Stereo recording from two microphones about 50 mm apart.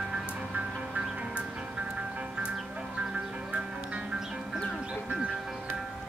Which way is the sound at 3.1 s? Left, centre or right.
Right.